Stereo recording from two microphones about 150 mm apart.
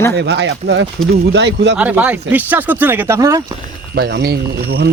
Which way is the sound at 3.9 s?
90° right.